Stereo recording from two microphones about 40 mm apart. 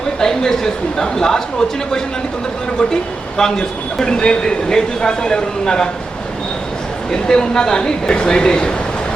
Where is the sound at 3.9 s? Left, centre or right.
Centre.